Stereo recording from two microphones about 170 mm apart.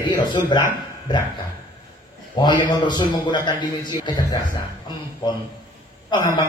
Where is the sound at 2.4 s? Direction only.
25° left (ahead or behind).